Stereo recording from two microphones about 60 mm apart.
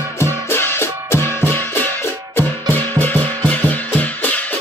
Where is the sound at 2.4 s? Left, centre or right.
Left.